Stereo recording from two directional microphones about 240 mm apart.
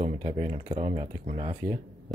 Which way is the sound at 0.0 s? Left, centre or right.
Centre.